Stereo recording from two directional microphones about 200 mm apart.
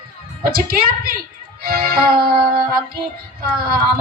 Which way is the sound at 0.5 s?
50° right (ahead or behind).